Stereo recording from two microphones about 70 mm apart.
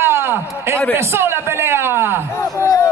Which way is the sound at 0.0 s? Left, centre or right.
Right.